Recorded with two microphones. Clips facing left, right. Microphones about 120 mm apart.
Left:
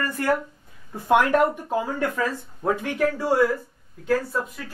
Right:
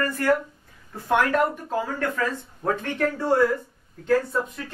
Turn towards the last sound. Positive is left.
turn(degrees=5)  # may be behind; listen again after turning